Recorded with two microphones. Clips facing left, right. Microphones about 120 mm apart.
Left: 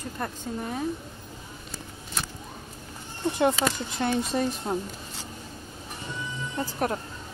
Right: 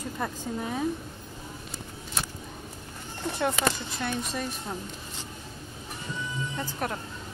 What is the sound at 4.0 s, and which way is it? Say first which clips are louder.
Speech: left 6 dB; 30° left (ahead or behind).